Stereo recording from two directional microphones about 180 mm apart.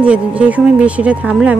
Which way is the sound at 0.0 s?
5° right (ahead or behind).